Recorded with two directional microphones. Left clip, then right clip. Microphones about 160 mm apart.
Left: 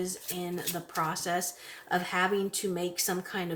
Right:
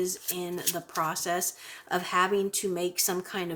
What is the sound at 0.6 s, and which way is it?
Speech, 20° right (ahead or behind).